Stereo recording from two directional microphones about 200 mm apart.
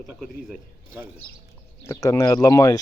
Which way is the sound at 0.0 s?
Centre (ahead or behind).